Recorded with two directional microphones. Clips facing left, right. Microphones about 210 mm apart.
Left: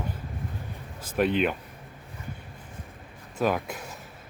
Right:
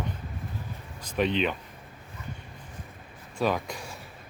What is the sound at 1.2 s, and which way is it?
Speech, 10° left (ahead or behind).